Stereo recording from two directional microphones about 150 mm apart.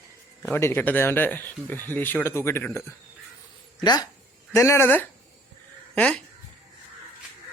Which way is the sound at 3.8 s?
25° left (ahead or behind).